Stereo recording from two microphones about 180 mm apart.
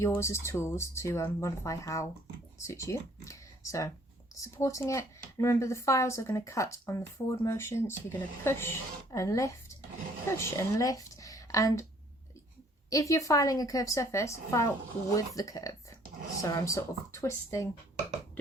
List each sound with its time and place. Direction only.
0.0 s a woman's voice: 15° left (ahead or behind)
12.9 s speech: 20° left (ahead or behind)